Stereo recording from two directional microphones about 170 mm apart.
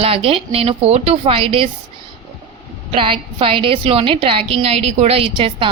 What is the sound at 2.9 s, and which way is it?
A woman's voice, 30° right (ahead or behind).